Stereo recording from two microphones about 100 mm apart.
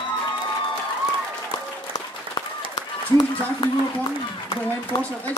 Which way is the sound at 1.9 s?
40° left (ahead or behind).